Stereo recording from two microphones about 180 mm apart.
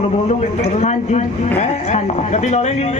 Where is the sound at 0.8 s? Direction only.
40° left (ahead or behind).